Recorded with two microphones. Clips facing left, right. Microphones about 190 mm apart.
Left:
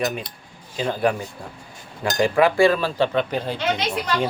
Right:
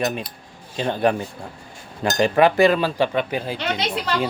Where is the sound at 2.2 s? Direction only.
25° right (ahead or behind).